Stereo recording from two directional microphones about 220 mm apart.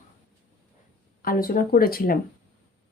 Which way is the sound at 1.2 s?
40° left (ahead or behind).